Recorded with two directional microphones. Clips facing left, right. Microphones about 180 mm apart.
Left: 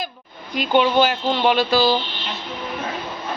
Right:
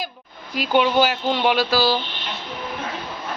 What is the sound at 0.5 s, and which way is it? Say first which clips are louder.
Speech: left 1 dB; 5° right (ahead or behind).